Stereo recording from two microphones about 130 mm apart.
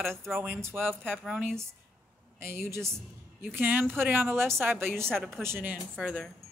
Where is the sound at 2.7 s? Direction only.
20° right (ahead or behind).